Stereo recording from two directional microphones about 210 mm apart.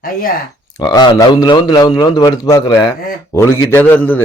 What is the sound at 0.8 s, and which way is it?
A man's voice, 20° left (ahead or behind).